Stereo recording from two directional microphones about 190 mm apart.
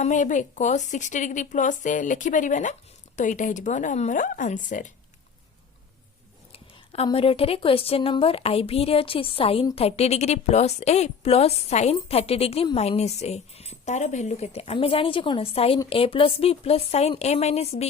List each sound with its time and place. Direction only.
0.0 s a woman's voice: 40° left (ahead or behind)
6.5 s a woman's voice: 30° left (ahead or behind)